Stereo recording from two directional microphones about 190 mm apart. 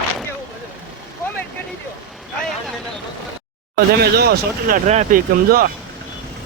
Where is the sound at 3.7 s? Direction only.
55° right (ahead or behind).